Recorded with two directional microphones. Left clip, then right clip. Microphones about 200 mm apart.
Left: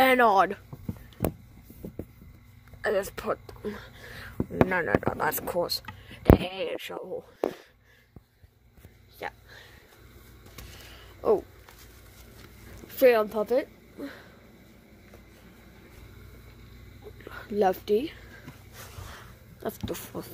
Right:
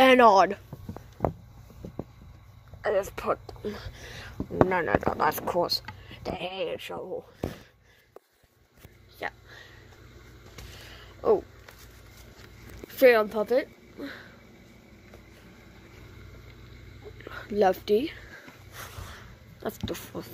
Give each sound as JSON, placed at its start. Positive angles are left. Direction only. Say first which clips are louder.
{"t": 0.0, "sound": "speech", "louder": "right 3 dB", "side_deg": 0}
{"t": 2.8, "sound": "speech", "louder": "right 1 dB", "side_deg": 15}
{"t": 9.2, "sound": "a sound", "louder": "right 2 dB", "side_deg": 10}
{"t": 10.7, "sound": "a sound", "louder": "right 1 dB", "side_deg": 10}
{"t": 12.8, "sound": "a woman's voice", "louder": "right 1 dB", "side_deg": 10}
{"t": 17.2, "sound": "whispering", "louder": "right 1 dB", "side_deg": 10}
{"t": 19.6, "sound": "speech", "louder": "even", "side_deg": 15}